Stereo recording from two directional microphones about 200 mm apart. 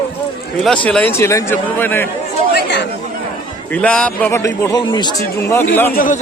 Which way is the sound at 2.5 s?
60° left (ahead or behind).